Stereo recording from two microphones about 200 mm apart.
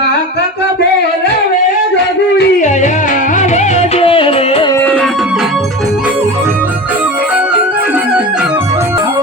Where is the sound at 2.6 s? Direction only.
40° left (ahead or behind).